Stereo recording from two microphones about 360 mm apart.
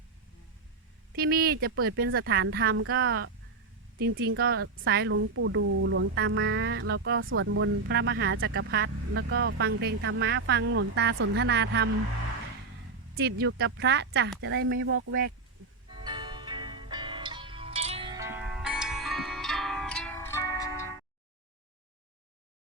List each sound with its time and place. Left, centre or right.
1.1 s speech: right
13.1 s speech: right
15.9 s music: centre